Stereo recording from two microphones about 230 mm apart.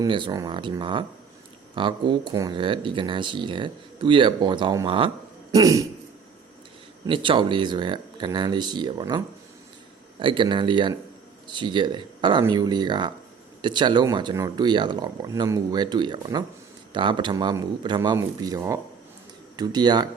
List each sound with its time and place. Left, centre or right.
0.0 s speech: centre
7.1 s speech: right